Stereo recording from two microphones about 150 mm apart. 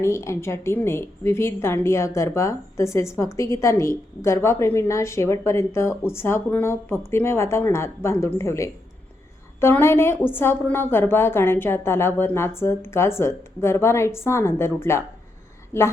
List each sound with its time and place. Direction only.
0.0 s a woman's voice: 20° left (ahead or behind)